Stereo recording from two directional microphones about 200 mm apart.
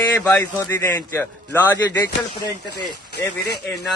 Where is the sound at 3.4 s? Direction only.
55° left (ahead or behind).